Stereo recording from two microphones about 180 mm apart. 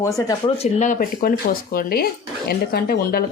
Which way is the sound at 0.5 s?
40° left (ahead or behind).